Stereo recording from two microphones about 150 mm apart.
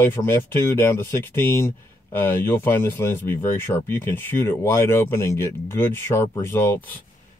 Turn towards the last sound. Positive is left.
turn(degrees=15)  # may be behind; listen again after turning